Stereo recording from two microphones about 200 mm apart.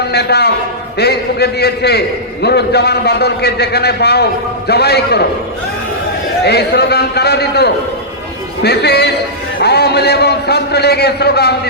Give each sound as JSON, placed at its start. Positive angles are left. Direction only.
{"t": 0.1, "sound": "a man's voice", "side_deg": 55}
{"t": 6.4, "sound": "a man's voice", "side_deg": 55}